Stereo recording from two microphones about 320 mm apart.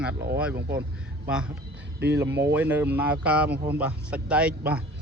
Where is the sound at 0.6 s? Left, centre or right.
Right.